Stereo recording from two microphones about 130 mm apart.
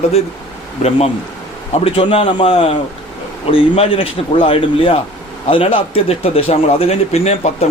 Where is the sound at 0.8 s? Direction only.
50° left (ahead or behind).